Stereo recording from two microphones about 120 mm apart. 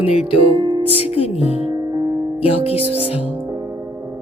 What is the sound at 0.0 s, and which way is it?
Music, 55° left (ahead or behind).